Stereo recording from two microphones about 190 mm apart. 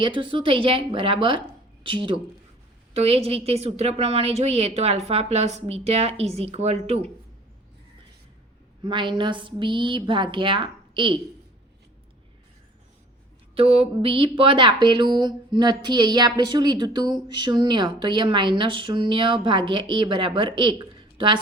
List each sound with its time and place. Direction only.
0.0 s a woman's voice: 25° right (ahead or behind)
8.8 s speech: 25° right (ahead or behind)
13.6 s speech: 30° right (ahead or behind)